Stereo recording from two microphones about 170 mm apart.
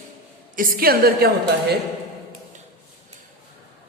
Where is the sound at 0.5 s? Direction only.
55° right (ahead or behind).